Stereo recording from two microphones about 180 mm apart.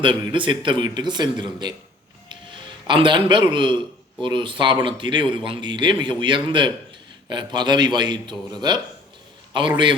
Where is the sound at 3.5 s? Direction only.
25° right (ahead or behind).